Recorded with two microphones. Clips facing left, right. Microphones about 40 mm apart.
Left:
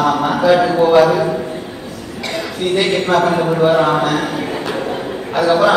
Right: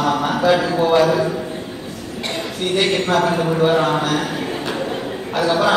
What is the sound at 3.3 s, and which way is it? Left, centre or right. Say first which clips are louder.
A man's voice: left 3 dB; centre.